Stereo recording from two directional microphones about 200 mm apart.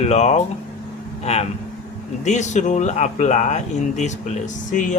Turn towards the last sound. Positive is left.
turn(degrees=40)  # may be behind; listen again after turning